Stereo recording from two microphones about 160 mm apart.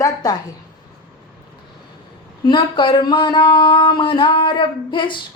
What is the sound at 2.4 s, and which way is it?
Speech, 30° left (ahead or behind).